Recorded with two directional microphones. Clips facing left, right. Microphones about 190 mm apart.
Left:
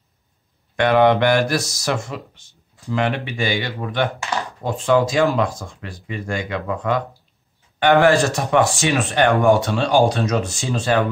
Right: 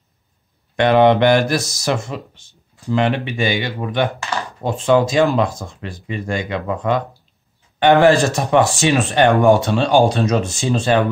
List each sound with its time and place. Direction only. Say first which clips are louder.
0.7 s speech: right 2 dB; 25° right (ahead or behind)